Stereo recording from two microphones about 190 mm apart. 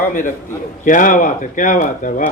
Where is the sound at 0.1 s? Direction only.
45° left (ahead or behind).